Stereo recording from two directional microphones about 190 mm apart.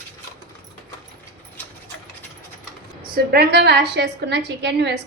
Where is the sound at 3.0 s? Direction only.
55° right (ahead or behind).